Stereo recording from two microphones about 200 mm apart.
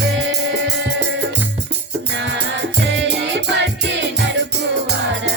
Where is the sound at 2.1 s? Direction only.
60° right (ahead or behind).